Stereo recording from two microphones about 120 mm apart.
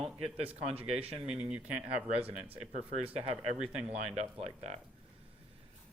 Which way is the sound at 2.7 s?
60° right (ahead or behind).